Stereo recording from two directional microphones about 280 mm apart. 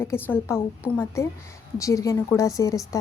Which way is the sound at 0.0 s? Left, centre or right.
Centre.